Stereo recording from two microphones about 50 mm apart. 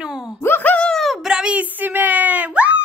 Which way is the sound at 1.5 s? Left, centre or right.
Right.